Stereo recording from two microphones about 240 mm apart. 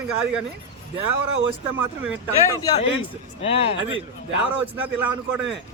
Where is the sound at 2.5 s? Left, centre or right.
Centre.